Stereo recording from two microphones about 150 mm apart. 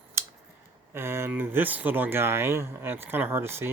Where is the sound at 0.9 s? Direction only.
15° right (ahead or behind).